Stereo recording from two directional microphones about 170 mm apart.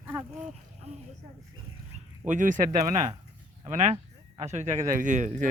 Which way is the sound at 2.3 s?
50° right (ahead or behind).